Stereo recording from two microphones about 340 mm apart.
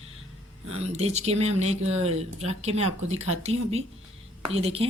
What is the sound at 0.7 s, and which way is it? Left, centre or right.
Speech, centre.